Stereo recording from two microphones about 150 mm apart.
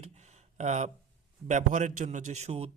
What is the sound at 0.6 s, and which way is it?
Speech, 50° right (ahead or behind).